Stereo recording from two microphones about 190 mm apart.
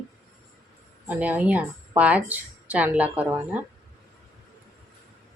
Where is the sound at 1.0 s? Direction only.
10° right (ahead or behind).